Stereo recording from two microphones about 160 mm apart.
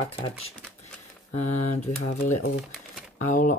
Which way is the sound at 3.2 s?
55° left (ahead or behind).